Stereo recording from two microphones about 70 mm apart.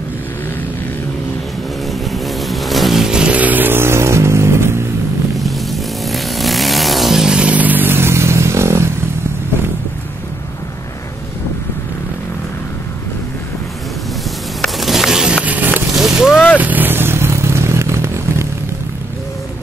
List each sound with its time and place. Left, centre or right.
2.1 s vehicle: centre; by 4.8 s right
5.4 s vehicle: centre; by 8.8 s right
14.6 s a sound: centre; by 15.8 s right
15.9 s vehicle: centre
16.5 s vehicle: right